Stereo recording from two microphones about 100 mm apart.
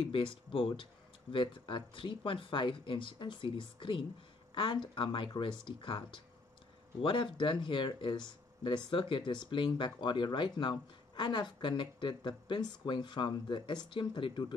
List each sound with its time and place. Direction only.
0.1 s speech: 60° left (ahead or behind)